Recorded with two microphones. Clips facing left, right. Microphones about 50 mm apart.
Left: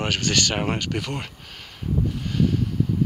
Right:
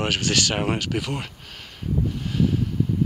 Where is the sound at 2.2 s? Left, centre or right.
Centre.